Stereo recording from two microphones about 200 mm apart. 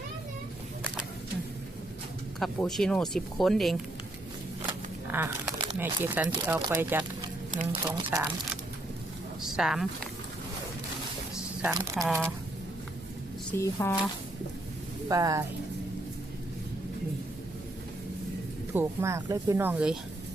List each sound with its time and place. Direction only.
2.4 s speech: centre (ahead or behind)
4.6 s a sound: 10° right (ahead or behind)
6.2 s speech: 20° right (ahead or behind)
6.7 s speech: 10° right (ahead or behind)
7.5 s speech: 35° right (ahead or behind)
7.9 s speech: 20° right (ahead or behind)
9.4 s speech: centre (ahead or behind)
11.6 s speech: 15° right (ahead or behind)
12.0 s speech: centre (ahead or behind)
13.5 s speech: 15° left (ahead or behind)
15.0 s speech: 20° right (ahead or behind)
18.7 s speech: 10° right (ahead or behind)